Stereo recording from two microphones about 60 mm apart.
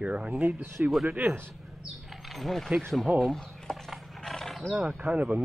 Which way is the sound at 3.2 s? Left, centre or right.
Centre.